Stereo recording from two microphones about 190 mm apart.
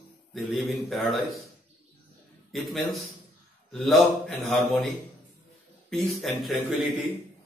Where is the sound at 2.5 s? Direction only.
Centre (ahead or behind).